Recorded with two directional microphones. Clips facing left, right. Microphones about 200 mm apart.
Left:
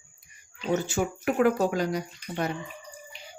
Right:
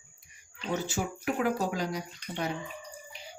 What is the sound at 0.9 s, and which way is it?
Speech, 55° left (ahead or behind).